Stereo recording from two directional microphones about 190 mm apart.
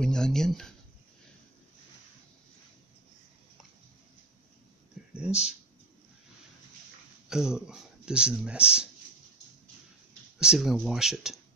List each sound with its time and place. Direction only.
0.0 s speech: 5° left (ahead or behind)
5.3 s speech: 35° left (ahead or behind)
7.2 s speech: 5° right (ahead or behind)
10.4 s speech: 5° right (ahead or behind)